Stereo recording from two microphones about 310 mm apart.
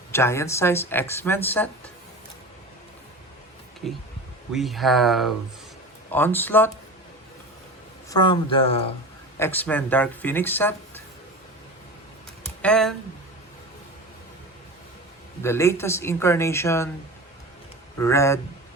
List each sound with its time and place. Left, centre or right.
0.1 s speech: centre
4.5 s speech: centre
8.1 s speech: centre
9.4 s speech: centre
12.6 s speech: centre
15.4 s speech: centre
18.0 s speech: centre